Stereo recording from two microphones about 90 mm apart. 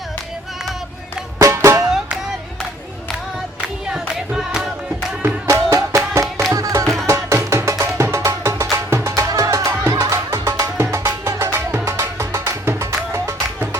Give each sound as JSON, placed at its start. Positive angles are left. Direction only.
{"t": 1.4, "sound": "music", "side_deg": -30}
{"t": 3.6, "sound": "music", "side_deg": -5}
{"t": 5.5, "sound": "music", "side_deg": -35}
{"t": 6.8, "sound": "music", "side_deg": 0}
{"t": 7.1, "sound": "music", "side_deg": -30}